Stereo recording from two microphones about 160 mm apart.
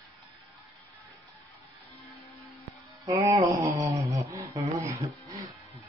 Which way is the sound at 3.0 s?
20° right (ahead or behind).